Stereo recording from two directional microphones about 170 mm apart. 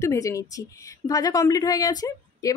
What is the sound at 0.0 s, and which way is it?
Speech, 15° left (ahead or behind).